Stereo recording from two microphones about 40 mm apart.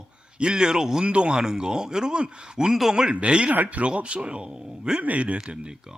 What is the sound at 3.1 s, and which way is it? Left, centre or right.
Speech, right.